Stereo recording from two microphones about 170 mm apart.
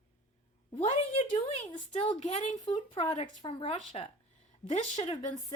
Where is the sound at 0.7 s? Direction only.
35° left (ahead or behind).